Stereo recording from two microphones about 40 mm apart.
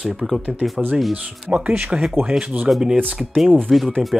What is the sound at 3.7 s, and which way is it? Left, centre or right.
Speech, centre.